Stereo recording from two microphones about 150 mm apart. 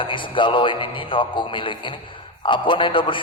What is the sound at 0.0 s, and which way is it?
A man's voice, 35° left (ahead or behind).